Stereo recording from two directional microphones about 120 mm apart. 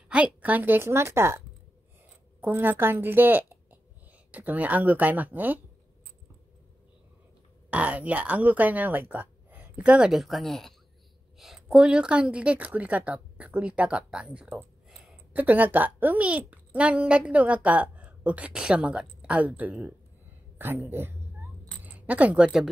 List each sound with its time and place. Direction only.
0.1 s a woman's voice: 10° right (ahead or behind)
2.4 s a woman's voice: 15° right (ahead or behind)
7.7 s a woman's voice: 10° right (ahead or behind)
14.9 s a sound: centre (ahead or behind)
15.3 s a woman's voice: 15° right (ahead or behind)
20.5 s cat: 20° right (ahead or behind)
21.8 s speech: 10° right (ahead or behind)